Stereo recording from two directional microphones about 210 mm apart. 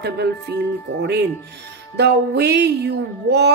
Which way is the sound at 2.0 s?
50° right (ahead or behind).